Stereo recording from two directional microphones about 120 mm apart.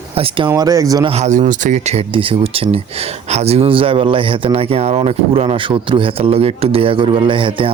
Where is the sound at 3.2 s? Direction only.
65° right (ahead or behind).